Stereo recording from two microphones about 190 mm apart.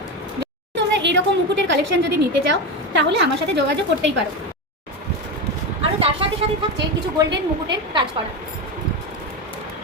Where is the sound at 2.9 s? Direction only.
65° right (ahead or behind).